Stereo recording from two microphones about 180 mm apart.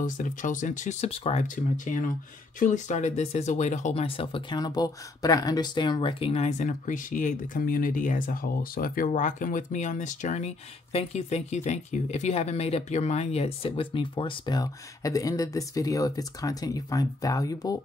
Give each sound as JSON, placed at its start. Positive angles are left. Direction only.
{"t": 0.0, "sound": "speech", "side_deg": 45}